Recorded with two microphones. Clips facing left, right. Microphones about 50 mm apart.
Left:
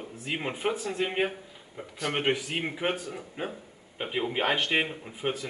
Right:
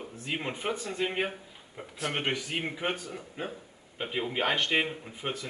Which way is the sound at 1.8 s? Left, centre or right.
Centre.